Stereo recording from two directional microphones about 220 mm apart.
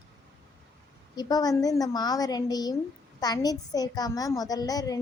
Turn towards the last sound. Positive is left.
turn(degrees=15)  # may be behind; listen again after turning